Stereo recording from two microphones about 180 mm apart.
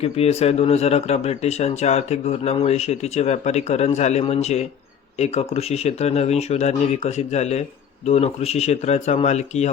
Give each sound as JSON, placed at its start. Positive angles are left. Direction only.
{"t": 0.0, "sound": "speech", "side_deg": 35}